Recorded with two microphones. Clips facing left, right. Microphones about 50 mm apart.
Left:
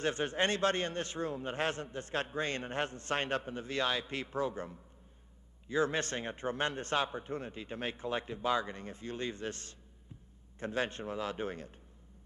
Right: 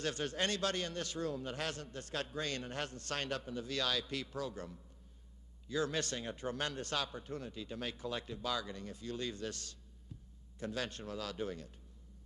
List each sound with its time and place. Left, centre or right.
0.0 s a man's voice: left